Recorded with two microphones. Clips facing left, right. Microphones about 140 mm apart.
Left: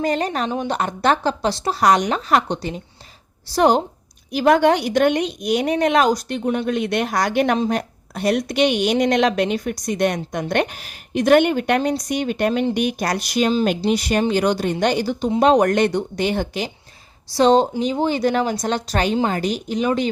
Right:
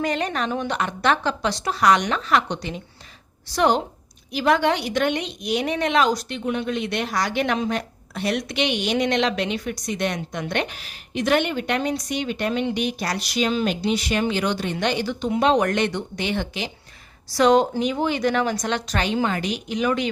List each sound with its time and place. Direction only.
0.0 s a woman's voice: 35° left (ahead or behind)
17.3 s a woman's voice: 30° left (ahead or behind)